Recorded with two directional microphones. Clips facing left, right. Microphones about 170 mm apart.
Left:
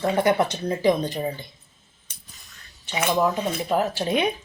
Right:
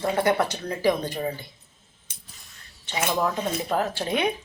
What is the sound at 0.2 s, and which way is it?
Speech, 20° left (ahead or behind).